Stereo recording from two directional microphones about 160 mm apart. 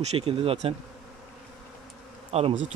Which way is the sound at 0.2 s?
35° right (ahead or behind).